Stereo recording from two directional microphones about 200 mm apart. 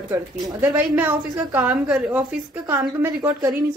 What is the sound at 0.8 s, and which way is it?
A woman's voice, 10° right (ahead or behind).